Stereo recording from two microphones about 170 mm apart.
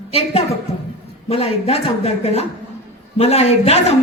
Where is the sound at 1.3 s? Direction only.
35° left (ahead or behind).